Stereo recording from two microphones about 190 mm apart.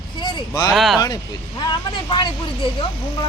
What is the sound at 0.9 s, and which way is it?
Speech, 20° left (ahead or behind).